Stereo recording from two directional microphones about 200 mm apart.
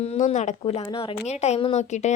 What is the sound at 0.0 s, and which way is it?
Speech, 35° left (ahead or behind).